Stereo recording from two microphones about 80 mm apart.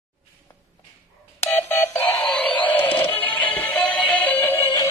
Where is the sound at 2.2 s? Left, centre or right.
Centre.